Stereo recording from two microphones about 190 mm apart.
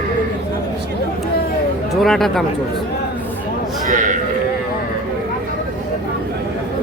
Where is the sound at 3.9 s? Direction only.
40° right (ahead or behind).